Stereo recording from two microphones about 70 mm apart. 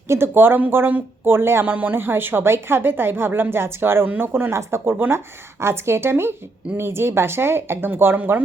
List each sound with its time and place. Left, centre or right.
0.1 s speech: right